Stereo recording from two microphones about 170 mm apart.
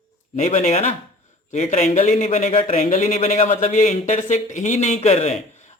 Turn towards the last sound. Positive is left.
turn(degrees=40)  # may be behind; listen again after turning